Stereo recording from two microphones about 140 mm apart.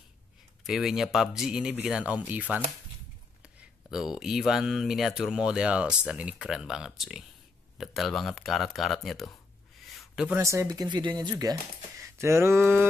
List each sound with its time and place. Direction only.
0.7 s speech: centre (ahead or behind)
3.4 s a sound: centre (ahead or behind)
4.2 s speech: 5° right (ahead or behind)
9.9 s a sound: 5° right (ahead or behind)
10.3 s speech: 20° right (ahead or behind)
12.0 s mantra: 20° right (ahead or behind)